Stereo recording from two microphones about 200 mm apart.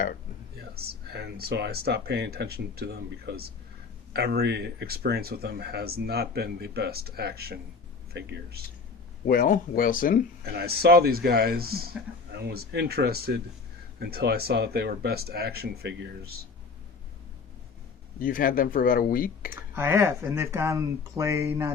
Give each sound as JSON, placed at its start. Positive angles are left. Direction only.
{"t": 0.7, "sound": "speech", "side_deg": -50}
{"t": 9.2, "sound": "speech", "side_deg": 45}
{"t": 10.4, "sound": "speech", "side_deg": -50}
{"t": 18.2, "sound": "speech", "side_deg": 45}
{"t": 19.7, "sound": "speech", "side_deg": -10}